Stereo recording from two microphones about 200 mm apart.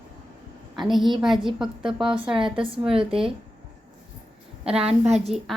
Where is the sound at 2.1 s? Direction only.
25° right (ahead or behind).